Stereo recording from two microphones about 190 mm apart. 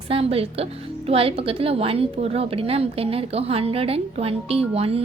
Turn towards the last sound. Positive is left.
turn(degrees=-30)  # may be behind; listen again after turning